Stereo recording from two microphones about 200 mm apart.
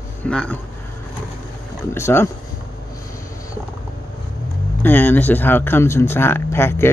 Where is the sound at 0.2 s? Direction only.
5° left (ahead or behind).